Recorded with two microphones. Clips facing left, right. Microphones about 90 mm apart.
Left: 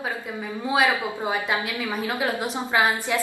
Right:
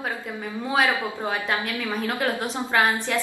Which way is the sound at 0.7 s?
15° left (ahead or behind).